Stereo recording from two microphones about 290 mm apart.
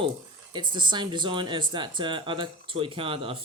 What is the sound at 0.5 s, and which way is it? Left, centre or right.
Speech, centre.